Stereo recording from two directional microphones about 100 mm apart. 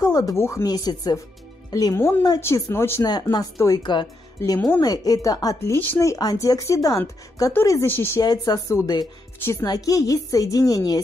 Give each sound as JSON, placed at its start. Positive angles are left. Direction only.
{"t": 0.0, "sound": "speech", "side_deg": 40}
{"t": 0.4, "sound": "speech", "side_deg": 30}
{"t": 0.7, "sound": "a woman's voice", "side_deg": 40}
{"t": 2.0, "sound": "speech", "side_deg": 25}
{"t": 3.1, "sound": "a woman's voice", "side_deg": 40}
{"t": 3.8, "sound": "speech", "side_deg": 50}
{"t": 4.8, "sound": "a woman's voice", "side_deg": 40}
{"t": 5.6, "sound": "speech", "side_deg": 20}
{"t": 5.9, "sound": "a woman's voice", "side_deg": 35}
{"t": 7.8, "sound": "speech", "side_deg": 20}
{"t": 8.2, "sound": "a woman's voice", "side_deg": 40}